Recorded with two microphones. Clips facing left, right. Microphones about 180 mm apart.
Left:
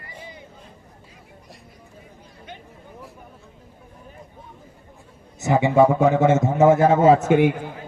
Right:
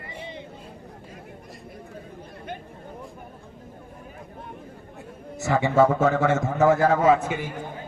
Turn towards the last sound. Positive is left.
turn(degrees=65)  # may be behind; listen again after turning